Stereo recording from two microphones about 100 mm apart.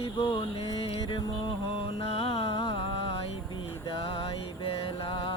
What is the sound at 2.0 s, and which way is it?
Music, 80° left.